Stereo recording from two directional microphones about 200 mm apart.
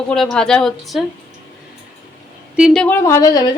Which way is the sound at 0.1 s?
Centre (ahead or behind).